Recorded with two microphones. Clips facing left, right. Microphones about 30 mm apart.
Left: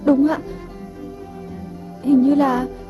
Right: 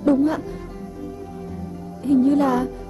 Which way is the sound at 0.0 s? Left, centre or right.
Centre.